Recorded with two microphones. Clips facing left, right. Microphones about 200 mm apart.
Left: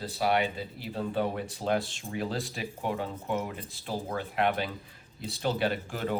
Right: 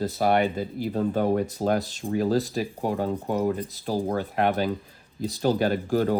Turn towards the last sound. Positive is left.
turn(degrees=-40)  # may be behind; listen again after turning